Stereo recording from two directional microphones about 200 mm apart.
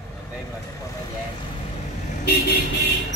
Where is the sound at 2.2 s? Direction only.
50° left (ahead or behind).